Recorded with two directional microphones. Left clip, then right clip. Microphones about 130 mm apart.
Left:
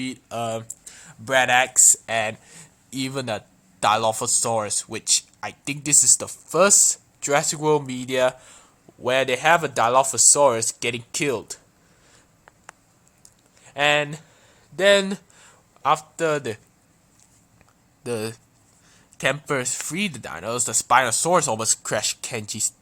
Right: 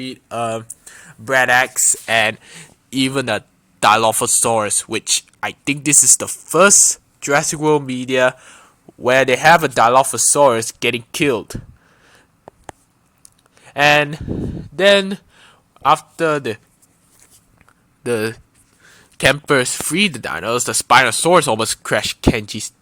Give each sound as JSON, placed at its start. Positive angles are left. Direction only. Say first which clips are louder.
{"t": 0.0, "sound": "speech", "louder": "right 5 dB", "side_deg": -25}
{"t": 13.2, "sound": "speech", "louder": "right 6 dB", "side_deg": -35}
{"t": 15.1, "sound": "a sound", "louder": "right 4 dB", "side_deg": -20}
{"t": 18.0, "sound": "speech", "louder": "right 8 dB", "side_deg": -20}
{"t": 18.8, "sound": "a sound", "louder": "right 9 dB", "side_deg": -25}
{"t": 19.9, "sound": "speech", "louder": "right 10 dB", "side_deg": -30}